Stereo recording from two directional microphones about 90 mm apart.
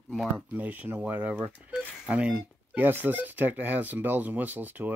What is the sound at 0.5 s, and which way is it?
Speech, 20° right (ahead or behind).